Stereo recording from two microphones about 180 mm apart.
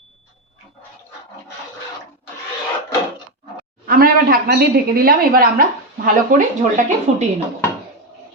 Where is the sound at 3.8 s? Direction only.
55° right (ahead or behind).